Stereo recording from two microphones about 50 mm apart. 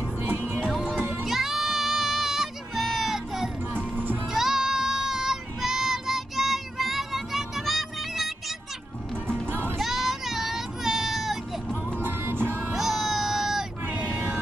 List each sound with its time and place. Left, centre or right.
0.2 s music: right
1.2 s music: centre
3.7 s music: right
4.3 s child singing: centre
9.3 s music: right
9.8 s child singing: centre
12.0 s music: right
12.7 s music: centre
13.8 s vehicle: right